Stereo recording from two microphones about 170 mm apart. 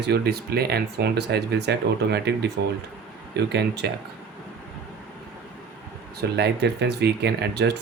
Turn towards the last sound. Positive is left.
turn(degrees=-85)